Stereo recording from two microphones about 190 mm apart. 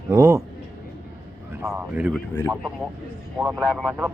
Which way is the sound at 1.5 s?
10° right (ahead or behind).